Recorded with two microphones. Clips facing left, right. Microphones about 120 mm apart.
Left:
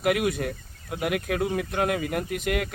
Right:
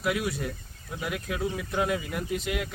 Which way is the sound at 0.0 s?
60° left (ahead or behind).